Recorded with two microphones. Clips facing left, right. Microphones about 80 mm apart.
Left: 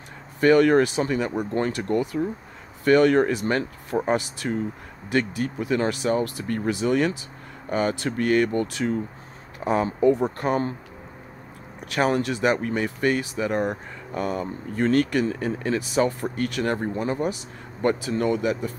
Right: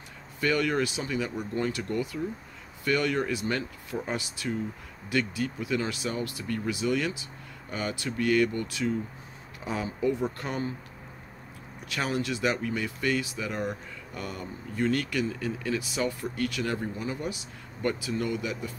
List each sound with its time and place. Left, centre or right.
0.4 s speech: left
11.8 s speech: left
14.1 s speech: left
14.4 s speech: left